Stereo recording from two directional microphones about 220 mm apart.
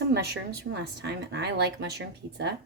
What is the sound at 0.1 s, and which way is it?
A woman's voice, 50° right (ahead or behind).